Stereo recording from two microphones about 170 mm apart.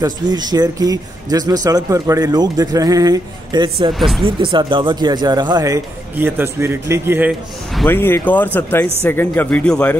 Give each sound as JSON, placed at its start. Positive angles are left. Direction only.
{"t": 0.0, "sound": "speech", "side_deg": -25}
{"t": 7.9, "sound": "speech", "side_deg": 10}